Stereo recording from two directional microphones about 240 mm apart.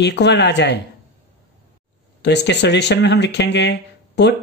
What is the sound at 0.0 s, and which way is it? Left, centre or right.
Speech, left.